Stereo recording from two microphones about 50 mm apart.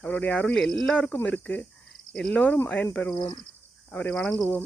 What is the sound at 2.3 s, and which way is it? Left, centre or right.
Cricket, left.